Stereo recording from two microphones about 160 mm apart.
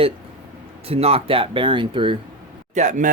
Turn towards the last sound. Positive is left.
turn(degrees=-50)  # may be behind; listen again after turning